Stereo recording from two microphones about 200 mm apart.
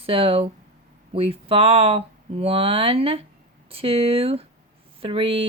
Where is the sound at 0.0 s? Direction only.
30° right (ahead or behind).